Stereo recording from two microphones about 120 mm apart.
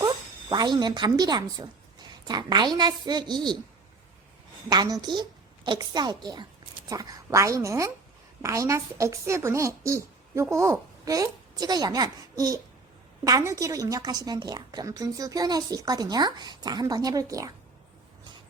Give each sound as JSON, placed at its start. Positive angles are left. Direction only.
{"t": 0.5, "sound": "a woman's voice", "side_deg": -35}
{"t": 4.7, "sound": "a woman's voice", "side_deg": -35}